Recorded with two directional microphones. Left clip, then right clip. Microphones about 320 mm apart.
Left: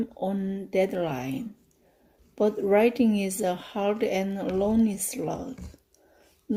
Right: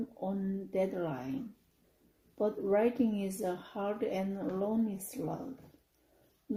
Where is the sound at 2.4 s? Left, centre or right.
Left.